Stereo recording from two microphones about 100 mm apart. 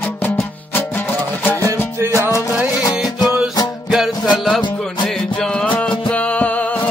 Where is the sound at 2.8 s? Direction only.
40° left (ahead or behind).